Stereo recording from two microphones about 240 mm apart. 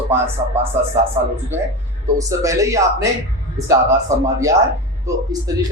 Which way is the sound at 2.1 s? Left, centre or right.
Centre.